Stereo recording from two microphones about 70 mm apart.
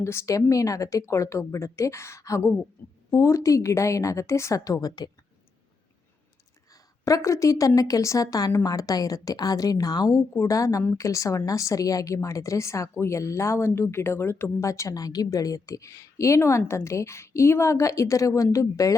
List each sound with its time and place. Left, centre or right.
0.0 s speech: left
7.0 s a woman's voice: left
10.1 s speech: left
14.7 s speech: left